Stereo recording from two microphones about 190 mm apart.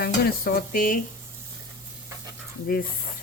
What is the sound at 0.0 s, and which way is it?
Stir, 50° left (ahead or behind).